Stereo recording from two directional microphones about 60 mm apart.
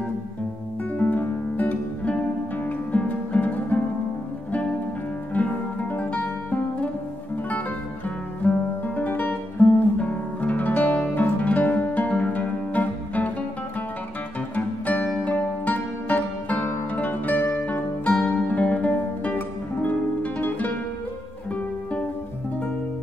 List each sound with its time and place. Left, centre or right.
0.9 s music: left
5.3 s music: left
8.4 s music: left
8.8 s guitar: left
11.4 s music: left
14.5 s music: left